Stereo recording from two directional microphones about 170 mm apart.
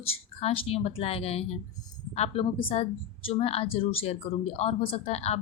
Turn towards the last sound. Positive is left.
turn(degrees=35)  # may be behind; listen again after turning